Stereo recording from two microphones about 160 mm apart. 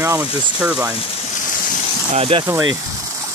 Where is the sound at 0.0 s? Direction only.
10° right (ahead or behind).